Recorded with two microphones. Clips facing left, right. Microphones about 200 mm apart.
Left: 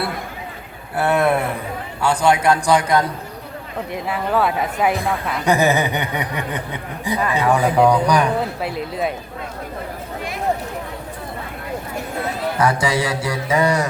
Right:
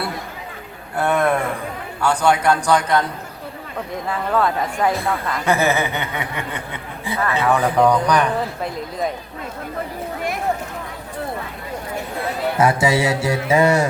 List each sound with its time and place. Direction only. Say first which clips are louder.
0.9 s a woman's voice: left 1 dB; 5° left (ahead or behind)
12.5 s speech: right 2 dB; 25° right (ahead or behind)